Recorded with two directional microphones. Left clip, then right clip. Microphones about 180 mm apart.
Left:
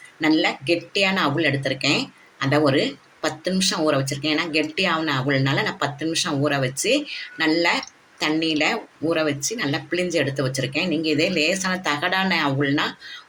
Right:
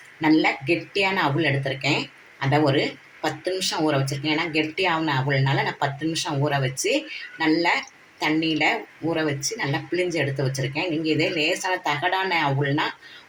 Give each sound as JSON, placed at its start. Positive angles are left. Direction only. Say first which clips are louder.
{"t": 0.2, "sound": "speech", "louder": "even", "side_deg": 70}